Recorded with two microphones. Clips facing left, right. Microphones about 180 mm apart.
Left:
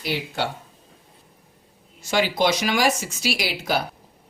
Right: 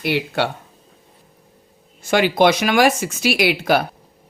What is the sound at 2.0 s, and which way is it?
Speech, 55° right (ahead or behind).